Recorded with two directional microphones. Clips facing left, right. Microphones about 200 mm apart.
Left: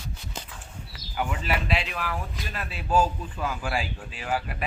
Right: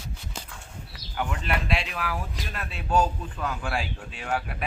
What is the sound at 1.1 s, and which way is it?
Speech, 5° left (ahead or behind).